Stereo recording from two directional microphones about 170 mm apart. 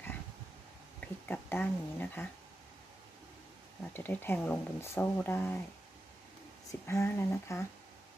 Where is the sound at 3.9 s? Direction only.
10° left (ahead or behind).